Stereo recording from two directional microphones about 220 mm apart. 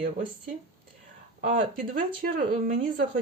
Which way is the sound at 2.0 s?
40° right (ahead or behind).